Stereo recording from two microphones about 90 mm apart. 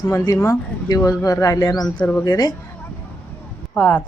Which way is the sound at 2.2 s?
45° left (ahead or behind).